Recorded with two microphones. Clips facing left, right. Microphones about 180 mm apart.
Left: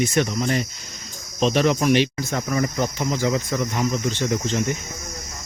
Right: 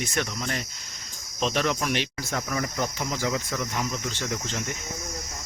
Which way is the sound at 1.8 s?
Centre (ahead or behind).